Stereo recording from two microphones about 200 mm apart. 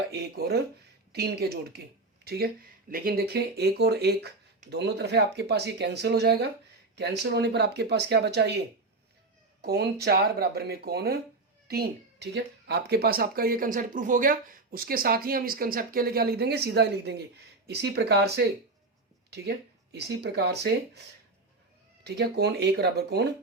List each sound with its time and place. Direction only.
0.1 s speech: 55° right (ahead or behind)
22.0 s speech: 55° right (ahead or behind)